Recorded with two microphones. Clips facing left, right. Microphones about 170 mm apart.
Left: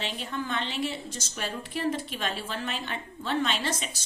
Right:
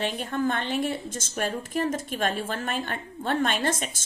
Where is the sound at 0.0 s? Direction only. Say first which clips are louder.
Right 7 dB; 50° right (ahead or behind).